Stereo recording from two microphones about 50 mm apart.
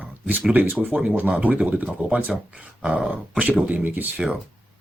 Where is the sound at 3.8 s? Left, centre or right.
Right.